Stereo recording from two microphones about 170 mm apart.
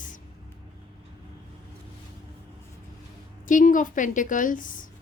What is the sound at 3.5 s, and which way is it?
A woman's voice, 50° left (ahead or behind).